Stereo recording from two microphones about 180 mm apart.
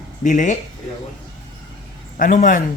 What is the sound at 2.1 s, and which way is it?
Speech, 45° left (ahead or behind).